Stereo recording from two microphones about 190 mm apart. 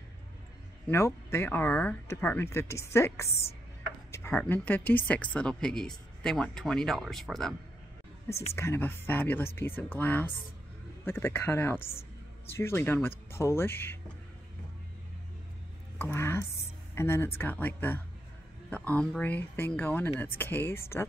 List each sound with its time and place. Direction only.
0.8 s speech: 15° left (ahead or behind)
3.3 s a woman's voice: 30° left (ahead or behind)
4.1 s speech: 10° left (ahead or behind)
8.5 s speech: 10° left (ahead or behind)
16.0 s a sound: 10° left (ahead or behind)
16.9 s speech: 10° left (ahead or behind)